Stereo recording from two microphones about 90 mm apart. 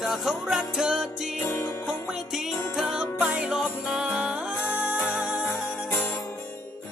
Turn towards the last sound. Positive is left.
turn(degrees=-10)  # may be behind; listen again after turning